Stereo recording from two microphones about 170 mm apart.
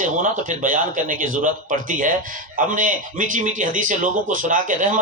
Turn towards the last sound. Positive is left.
turn(degrees=-50)  # may be behind; listen again after turning